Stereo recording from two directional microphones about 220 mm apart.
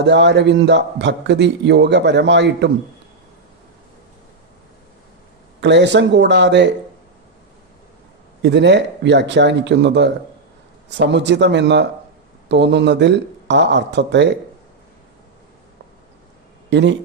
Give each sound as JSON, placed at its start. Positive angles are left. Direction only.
{"t": 0.0, "sound": "a man's voice", "side_deg": -50}
{"t": 5.5, "sound": "a man's voice", "side_deg": -55}
{"t": 8.4, "sound": "a man's voice", "side_deg": -50}
{"t": 16.6, "sound": "speech", "side_deg": -55}